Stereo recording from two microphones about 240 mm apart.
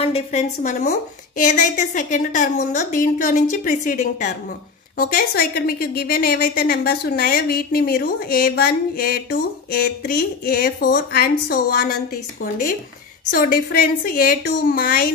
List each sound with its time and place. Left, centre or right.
0.0 s a woman's voice: left